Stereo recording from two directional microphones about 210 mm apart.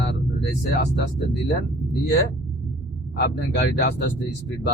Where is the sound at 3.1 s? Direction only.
50° left (ahead or behind).